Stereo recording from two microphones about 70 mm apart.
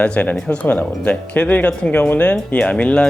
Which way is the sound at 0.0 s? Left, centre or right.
Centre.